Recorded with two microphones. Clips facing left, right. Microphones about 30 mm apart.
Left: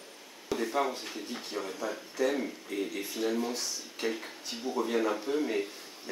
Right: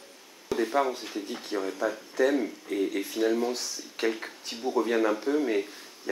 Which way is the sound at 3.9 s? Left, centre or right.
Right.